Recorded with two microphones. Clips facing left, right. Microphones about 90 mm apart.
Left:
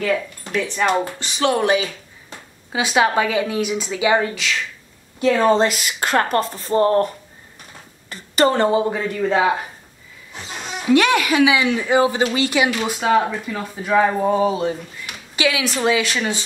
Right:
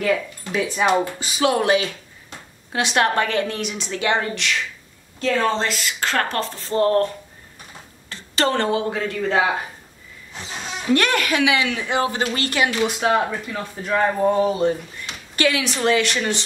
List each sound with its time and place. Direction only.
0.0 s speech: 5° right (ahead or behind); by 7.1 s 15° left (ahead or behind)
8.1 s speech: 10° left (ahead or behind)
10.9 s speech: 10° left (ahead or behind)